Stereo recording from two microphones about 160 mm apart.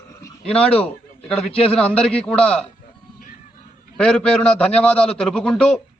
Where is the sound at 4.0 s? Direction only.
5° left (ahead or behind).